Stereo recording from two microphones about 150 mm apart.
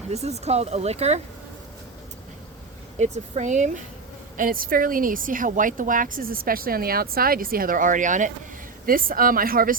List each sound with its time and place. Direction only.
0.1 s speech: 45° right (ahead or behind)
3.0 s speech: 50° right (ahead or behind)
4.4 s speech: 70° right (ahead or behind)
8.9 s speech: 70° right (ahead or behind)